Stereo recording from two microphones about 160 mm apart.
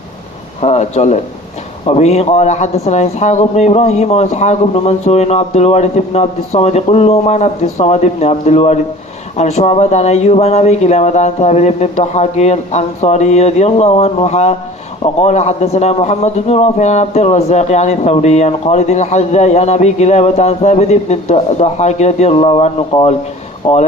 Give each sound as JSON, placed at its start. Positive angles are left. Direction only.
{"t": 0.6, "sound": "a man's voice", "side_deg": 45}